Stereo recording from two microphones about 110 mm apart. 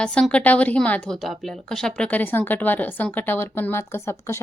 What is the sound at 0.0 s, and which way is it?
A woman's voice, 10° left (ahead or behind).